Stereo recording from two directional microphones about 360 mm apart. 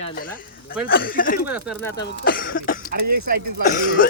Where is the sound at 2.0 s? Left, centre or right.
Left.